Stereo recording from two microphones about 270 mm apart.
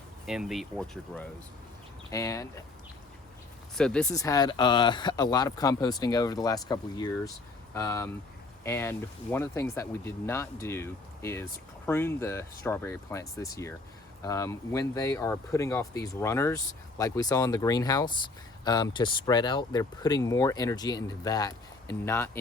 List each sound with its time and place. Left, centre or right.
0.3 s speech: centre
3.8 s speech: centre